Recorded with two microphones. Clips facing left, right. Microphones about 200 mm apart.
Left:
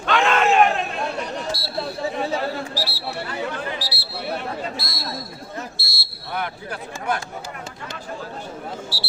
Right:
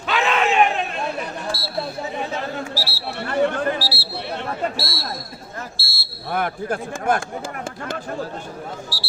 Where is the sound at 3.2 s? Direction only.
50° right (ahead or behind).